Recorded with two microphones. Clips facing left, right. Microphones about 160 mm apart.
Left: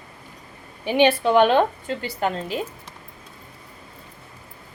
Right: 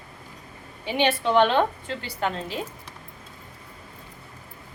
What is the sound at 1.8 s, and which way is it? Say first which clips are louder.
Speech: left 4 dB; 45° left (ahead or behind).